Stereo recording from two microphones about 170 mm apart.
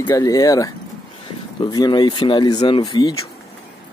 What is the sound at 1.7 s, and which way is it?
Speech, 25° left (ahead or behind).